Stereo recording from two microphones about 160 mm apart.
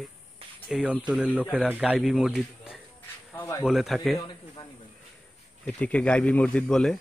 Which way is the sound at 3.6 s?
Centre (ahead or behind).